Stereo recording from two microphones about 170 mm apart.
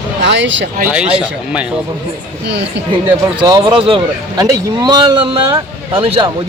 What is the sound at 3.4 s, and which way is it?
A man's voice, 25° right (ahead or behind).